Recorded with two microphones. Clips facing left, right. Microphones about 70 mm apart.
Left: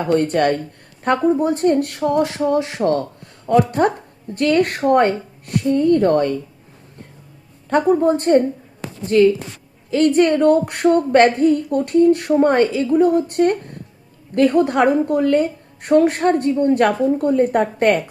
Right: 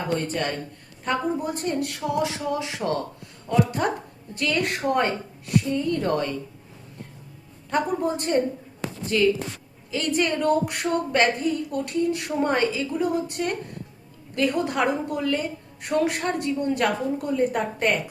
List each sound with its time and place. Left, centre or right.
0.0 s a woman's voice: left
7.7 s a woman's voice: left
9.0 s a woman's voice: left
10.2 s a woman's voice: left